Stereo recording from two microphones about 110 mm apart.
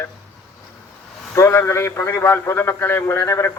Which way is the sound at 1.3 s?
25° left (ahead or behind).